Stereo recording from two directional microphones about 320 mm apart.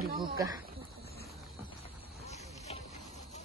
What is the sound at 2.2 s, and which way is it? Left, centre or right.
Vehicle, centre.